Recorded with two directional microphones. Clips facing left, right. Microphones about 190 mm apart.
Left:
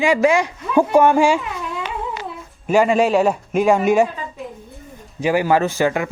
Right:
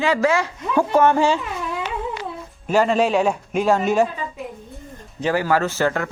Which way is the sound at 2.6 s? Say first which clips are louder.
Left 2 dB; 10° left (ahead or behind).